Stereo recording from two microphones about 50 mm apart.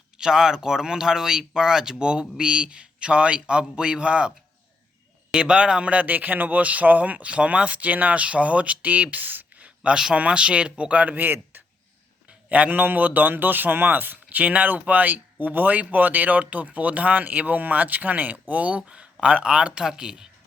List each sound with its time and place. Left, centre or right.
0.2 s speech: centre
5.3 s a man's voice: centre; by 9.5 s right
9.6 s a sound: right
9.9 s a man's voice: centre; by 11.6 s right
12.5 s a man's voice: right; by 20.2 s centre